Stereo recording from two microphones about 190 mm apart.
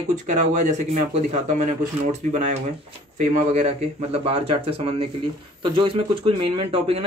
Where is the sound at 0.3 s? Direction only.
40° right (ahead or behind).